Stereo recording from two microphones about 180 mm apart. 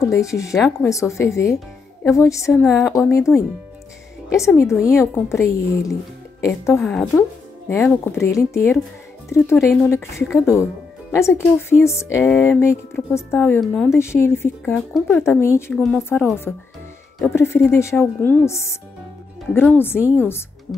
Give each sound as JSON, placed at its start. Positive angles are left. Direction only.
{"t": 0.0, "sound": "speech", "side_deg": 15}
{"t": 2.6, "sound": "speech", "side_deg": 0}
{"t": 2.9, "sound": "speech", "side_deg": 15}
{"t": 4.6, "sound": "speech", "side_deg": 15}
{"t": 6.8, "sound": "speech", "side_deg": 5}
{"t": 13.6, "sound": "speech", "side_deg": 0}
{"t": 13.9, "sound": "speech", "side_deg": 15}
{"t": 15.7, "sound": "speech", "side_deg": 5}